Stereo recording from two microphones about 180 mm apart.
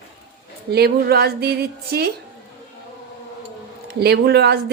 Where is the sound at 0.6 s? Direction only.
60° right (ahead or behind).